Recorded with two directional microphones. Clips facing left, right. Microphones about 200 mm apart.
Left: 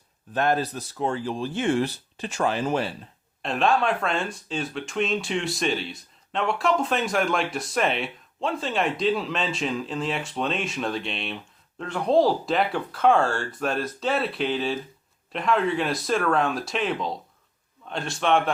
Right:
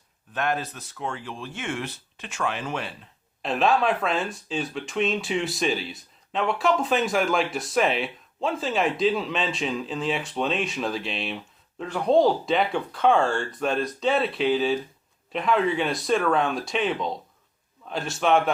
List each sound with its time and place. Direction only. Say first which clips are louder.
0.3 s speech: left 4 dB; 35° left (ahead or behind)
3.4 s speech: right 1 dB; centre (ahead or behind)